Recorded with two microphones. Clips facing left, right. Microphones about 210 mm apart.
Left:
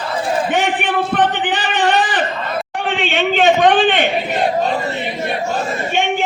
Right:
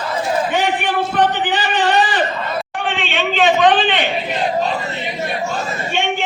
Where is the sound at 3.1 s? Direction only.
45° left (ahead or behind).